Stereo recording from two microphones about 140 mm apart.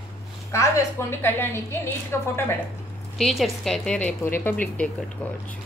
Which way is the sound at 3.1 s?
Centre (ahead or behind).